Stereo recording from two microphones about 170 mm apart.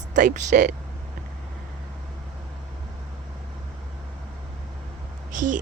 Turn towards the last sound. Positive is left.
turn(degrees=-50)  # may be behind; listen again after turning